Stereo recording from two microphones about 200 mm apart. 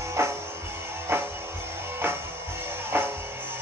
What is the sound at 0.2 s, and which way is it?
Music, 15° right (ahead or behind).